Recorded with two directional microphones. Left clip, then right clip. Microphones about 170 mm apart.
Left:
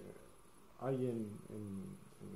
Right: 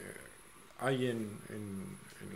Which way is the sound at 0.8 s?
10° right (ahead or behind).